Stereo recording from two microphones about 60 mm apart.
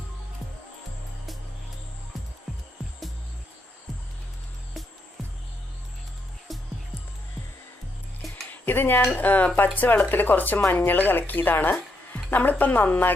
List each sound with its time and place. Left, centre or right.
8.5 s speech: left